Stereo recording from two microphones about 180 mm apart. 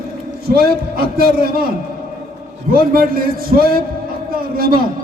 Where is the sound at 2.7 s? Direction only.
55° right (ahead or behind).